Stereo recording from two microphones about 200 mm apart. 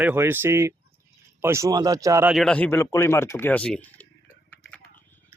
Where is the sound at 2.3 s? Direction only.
5° left (ahead or behind).